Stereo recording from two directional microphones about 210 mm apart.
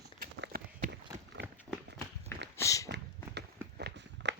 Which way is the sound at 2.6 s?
15° left (ahead or behind).